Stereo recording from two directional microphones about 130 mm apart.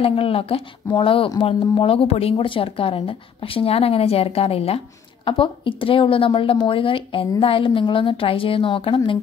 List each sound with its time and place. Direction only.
0.0 s a woman's voice: 45° left (ahead or behind)